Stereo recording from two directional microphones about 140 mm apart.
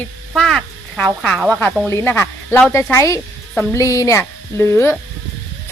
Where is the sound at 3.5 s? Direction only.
10° left (ahead or behind).